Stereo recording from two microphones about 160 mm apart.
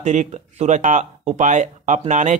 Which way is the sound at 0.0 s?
45° right (ahead or behind).